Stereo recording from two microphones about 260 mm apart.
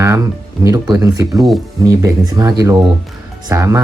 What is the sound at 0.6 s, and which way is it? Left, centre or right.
Speech, centre.